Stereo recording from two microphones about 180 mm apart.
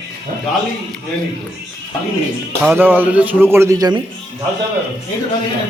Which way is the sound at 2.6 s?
10° right (ahead or behind).